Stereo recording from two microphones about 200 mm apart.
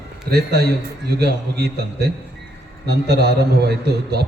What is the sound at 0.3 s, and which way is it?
A man's voice, 50° right (ahead or behind).